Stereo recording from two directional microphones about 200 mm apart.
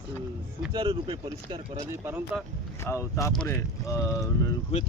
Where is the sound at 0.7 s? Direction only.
25° right (ahead or behind).